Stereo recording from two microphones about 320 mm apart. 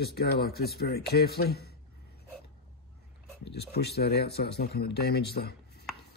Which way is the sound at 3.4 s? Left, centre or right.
Left.